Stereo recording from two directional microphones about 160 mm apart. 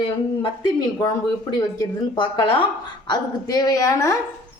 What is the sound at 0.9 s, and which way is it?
Speech, 25° left (ahead or behind).